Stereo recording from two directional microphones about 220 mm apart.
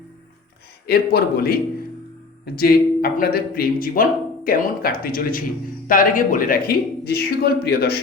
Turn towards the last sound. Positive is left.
turn(degrees=45)  # may be behind; listen again after turning